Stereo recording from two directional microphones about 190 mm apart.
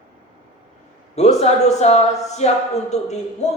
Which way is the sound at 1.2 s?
35° left (ahead or behind).